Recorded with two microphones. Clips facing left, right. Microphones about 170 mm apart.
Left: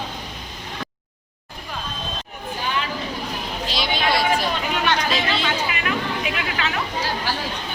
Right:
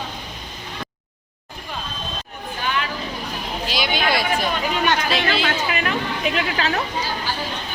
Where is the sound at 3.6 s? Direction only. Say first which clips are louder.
Right 1 dB; centre (ahead or behind).